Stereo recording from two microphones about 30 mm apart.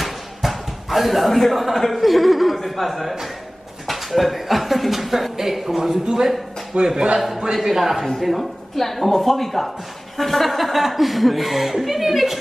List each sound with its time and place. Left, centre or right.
0.0 s a sound: centre
1.8 s speech: centre
6.7 s a man's voice: right
7.2 s speech: centre